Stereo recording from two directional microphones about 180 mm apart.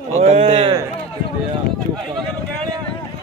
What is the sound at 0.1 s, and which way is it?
Speech, 35° right (ahead or behind).